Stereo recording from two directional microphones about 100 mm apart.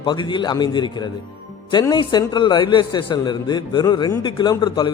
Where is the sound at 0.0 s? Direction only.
50° left (ahead or behind).